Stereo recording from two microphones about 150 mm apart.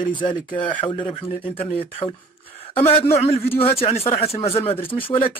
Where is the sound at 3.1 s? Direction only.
40° left (ahead or behind).